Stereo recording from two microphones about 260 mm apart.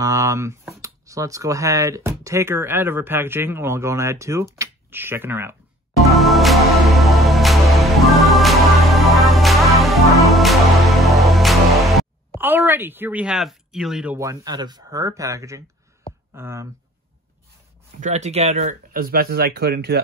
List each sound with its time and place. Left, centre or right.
0.0 s speech: centre
6.1 s music: centre
16.3 s speech: centre
18.0 s speech: right